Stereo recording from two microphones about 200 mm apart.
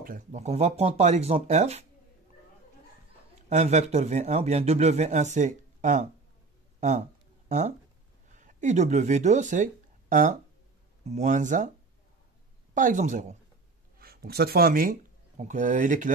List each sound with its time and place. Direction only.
0.0 s speech: 40° right (ahead or behind)
3.3 s speech: 35° right (ahead or behind)
6.8 s a sound: 35° right (ahead or behind)
8.4 s speech: 40° right (ahead or behind)
12.7 s speech: 40° right (ahead or behind)
13.9 s speech: 50° right (ahead or behind)